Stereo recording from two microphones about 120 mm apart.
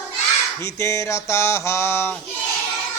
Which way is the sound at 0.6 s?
25° left (ahead or behind).